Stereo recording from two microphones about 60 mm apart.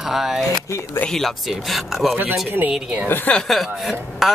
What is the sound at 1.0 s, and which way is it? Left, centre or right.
Speech, left.